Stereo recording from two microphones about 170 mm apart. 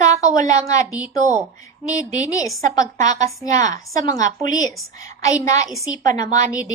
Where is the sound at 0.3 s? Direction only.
20° left (ahead or behind).